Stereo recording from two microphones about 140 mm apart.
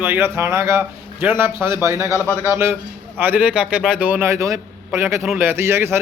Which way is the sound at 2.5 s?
20° right (ahead or behind).